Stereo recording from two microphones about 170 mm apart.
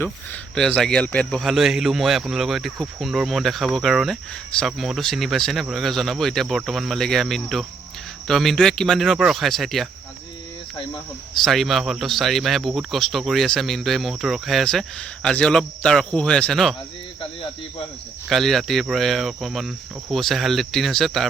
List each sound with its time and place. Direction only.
0.5 s speech: 5° left (ahead or behind)
11.4 s speech: centre (ahead or behind)
17.2 s cricket: 30° left (ahead or behind)
18.3 s speech: centre (ahead or behind)